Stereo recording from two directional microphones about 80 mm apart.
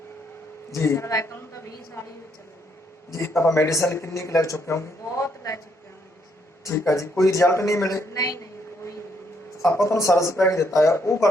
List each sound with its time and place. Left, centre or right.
0.7 s a woman's voice: left
3.1 s speech: left
6.7 s speech: left
9.6 s speech: left